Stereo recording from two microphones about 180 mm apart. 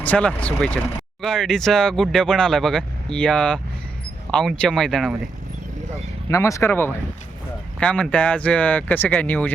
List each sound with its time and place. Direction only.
0.0 s speech: 5° left (ahead or behind)
6.2 s speech: 15° left (ahead or behind)